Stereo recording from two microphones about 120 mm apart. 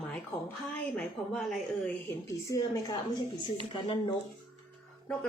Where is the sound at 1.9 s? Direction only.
20° left (ahead or behind).